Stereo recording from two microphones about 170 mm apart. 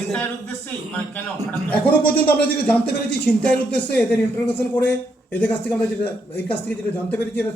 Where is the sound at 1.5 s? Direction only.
10° left (ahead or behind).